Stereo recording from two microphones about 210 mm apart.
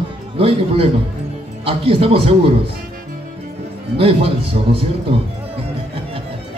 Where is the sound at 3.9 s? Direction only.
25° right (ahead or behind).